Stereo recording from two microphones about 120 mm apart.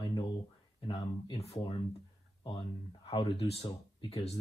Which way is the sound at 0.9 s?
50° left (ahead or behind).